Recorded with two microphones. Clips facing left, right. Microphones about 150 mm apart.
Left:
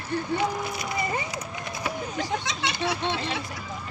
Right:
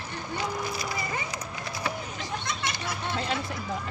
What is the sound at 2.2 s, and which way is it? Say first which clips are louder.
Speech: left 7 dB; 75° left (ahead or behind).